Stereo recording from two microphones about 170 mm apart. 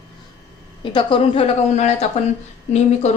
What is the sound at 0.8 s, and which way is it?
A woman's voice, 30° left (ahead or behind).